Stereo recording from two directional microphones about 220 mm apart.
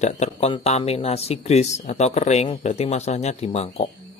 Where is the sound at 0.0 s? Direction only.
30° left (ahead or behind).